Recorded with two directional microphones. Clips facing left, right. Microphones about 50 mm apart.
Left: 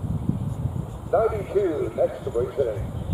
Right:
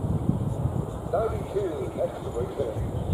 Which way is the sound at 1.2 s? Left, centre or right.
Left.